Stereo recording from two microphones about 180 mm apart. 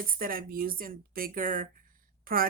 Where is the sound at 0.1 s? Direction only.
55° right (ahead or behind).